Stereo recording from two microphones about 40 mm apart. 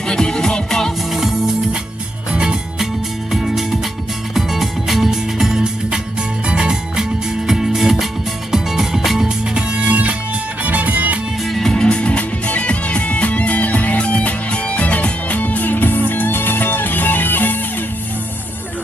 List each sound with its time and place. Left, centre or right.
0.1 s music: centre
1.1 s music: centre
2.3 s music: right
3.3 s music: centre
9.6 s music: right
11.4 s music: centre
11.9 s music: left